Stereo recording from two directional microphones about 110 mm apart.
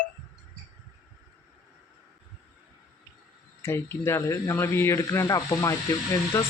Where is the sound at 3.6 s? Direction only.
25° left (ahead or behind).